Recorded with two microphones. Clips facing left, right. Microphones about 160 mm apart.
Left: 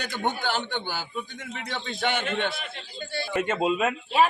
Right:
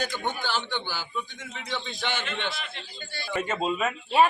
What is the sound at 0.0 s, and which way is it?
A man's voice, 60° left (ahead or behind).